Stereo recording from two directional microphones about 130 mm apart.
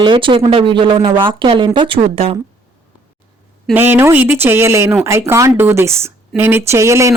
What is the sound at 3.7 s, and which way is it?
Speech, 15° right (ahead or behind).